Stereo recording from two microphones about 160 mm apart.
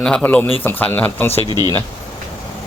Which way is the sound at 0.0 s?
5° left (ahead or behind).